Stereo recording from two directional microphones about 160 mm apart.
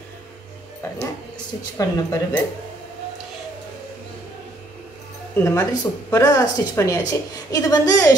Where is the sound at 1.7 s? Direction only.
20° left (ahead or behind).